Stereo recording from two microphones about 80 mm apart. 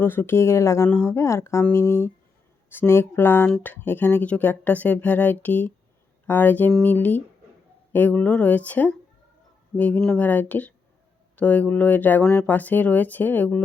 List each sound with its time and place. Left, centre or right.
0.0 s speech: left